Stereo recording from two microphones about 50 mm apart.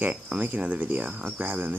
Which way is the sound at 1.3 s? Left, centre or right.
Right.